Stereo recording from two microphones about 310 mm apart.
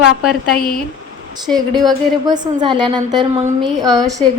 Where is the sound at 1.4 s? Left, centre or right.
Centre.